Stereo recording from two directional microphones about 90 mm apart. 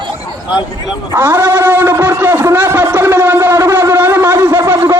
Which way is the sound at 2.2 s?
25° right (ahead or behind).